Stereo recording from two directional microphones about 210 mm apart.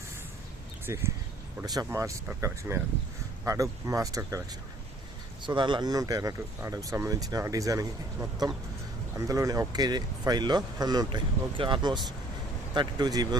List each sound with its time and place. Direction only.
0.9 s speech: 15° right (ahead or behind)